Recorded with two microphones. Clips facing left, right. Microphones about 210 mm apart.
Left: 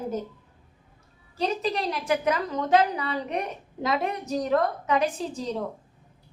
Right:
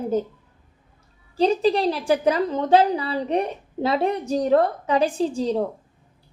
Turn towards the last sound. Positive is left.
turn(degrees=-30)  # may be behind; listen again after turning